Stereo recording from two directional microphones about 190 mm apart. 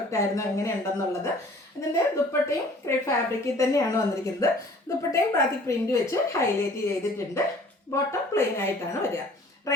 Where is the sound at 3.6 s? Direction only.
15° left (ahead or behind).